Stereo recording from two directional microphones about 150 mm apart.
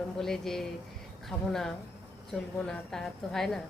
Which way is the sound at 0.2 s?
5° left (ahead or behind).